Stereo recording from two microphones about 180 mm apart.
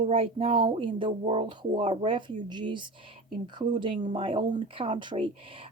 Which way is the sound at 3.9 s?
40° right (ahead or behind).